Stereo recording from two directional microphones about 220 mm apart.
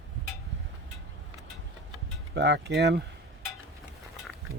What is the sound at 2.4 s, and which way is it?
Speech, 50° right (ahead or behind).